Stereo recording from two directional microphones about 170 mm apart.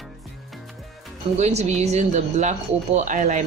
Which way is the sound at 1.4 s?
40° right (ahead or behind).